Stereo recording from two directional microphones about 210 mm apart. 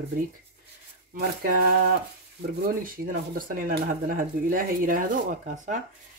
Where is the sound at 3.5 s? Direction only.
40° right (ahead or behind).